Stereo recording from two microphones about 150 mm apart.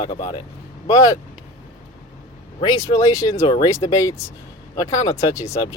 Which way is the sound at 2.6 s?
25° left (ahead or behind).